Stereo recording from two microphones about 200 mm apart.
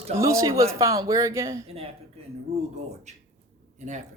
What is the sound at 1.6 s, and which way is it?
A woman's voice, 30° right (ahead or behind).